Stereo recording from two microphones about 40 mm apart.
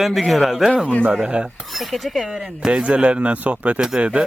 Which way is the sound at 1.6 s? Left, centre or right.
Centre.